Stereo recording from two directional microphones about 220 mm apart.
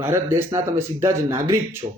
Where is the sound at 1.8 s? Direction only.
25° right (ahead or behind).